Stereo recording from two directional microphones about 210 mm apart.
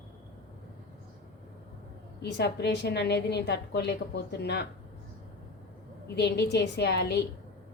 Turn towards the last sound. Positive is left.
turn(degrees=55)  # may be behind; listen again after turning